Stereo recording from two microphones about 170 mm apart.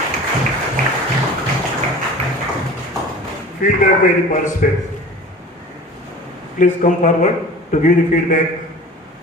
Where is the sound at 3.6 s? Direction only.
50° left (ahead or behind).